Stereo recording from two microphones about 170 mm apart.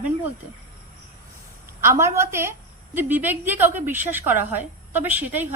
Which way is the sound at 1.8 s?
15° right (ahead or behind).